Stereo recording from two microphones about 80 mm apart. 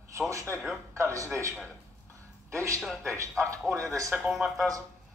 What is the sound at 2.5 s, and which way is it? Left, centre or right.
A man's voice, right.